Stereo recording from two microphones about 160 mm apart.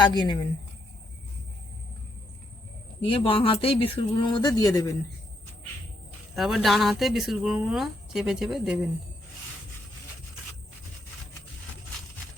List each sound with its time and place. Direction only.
0.0 s a woman's voice: 30° left (ahead or behind)
3.0 s speech: 35° left (ahead or behind)
6.3 s speech: centre (ahead or behind)